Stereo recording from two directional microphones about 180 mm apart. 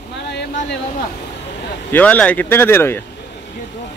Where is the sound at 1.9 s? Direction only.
10° left (ahead or behind).